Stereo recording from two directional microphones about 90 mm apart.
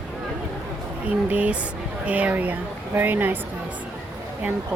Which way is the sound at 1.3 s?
15° right (ahead or behind).